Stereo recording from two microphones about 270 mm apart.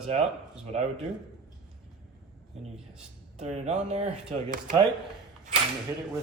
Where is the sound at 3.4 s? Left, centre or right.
Right.